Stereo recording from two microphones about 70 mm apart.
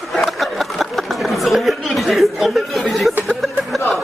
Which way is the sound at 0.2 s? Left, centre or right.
Centre.